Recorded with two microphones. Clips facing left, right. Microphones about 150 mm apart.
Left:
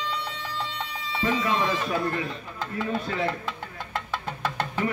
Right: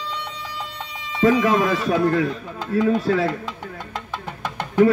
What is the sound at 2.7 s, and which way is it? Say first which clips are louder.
Speech: right 12 dB; 90° right.